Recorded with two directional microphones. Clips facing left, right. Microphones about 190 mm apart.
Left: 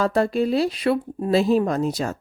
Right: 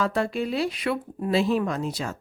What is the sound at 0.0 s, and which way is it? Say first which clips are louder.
A woman's voice: left 5 dB; 40° left (ahead or behind).